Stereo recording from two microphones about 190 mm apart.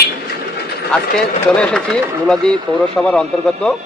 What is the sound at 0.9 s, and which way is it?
Speech, 5° left (ahead or behind).